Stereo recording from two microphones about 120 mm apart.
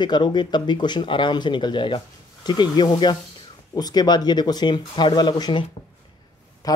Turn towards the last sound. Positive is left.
turn(degrees=30)  # may be behind; listen again after turning